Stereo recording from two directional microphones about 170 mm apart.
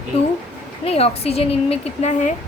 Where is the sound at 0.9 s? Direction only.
35° left (ahead or behind).